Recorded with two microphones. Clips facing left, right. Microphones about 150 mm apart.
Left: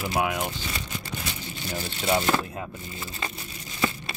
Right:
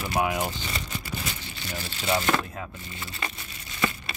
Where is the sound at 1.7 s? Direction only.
10° left (ahead or behind).